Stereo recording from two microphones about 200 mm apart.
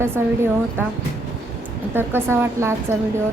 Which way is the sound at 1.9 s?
10° right (ahead or behind).